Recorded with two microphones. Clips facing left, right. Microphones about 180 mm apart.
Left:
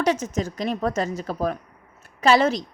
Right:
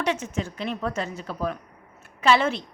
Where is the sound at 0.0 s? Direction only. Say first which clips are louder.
Left 4 dB; 40° left (ahead or behind).